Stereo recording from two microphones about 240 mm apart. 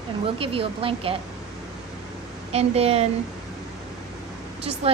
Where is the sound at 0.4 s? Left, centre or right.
Right.